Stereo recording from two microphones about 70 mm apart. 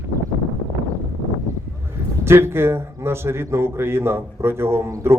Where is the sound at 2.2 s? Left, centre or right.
Right.